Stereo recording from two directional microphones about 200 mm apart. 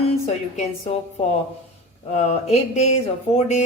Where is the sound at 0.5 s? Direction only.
35° left (ahead or behind).